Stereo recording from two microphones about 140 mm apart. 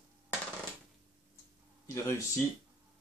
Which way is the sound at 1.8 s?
20° left (ahead or behind).